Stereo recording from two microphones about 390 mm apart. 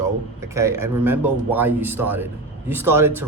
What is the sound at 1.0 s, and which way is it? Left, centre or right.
A man's voice, centre.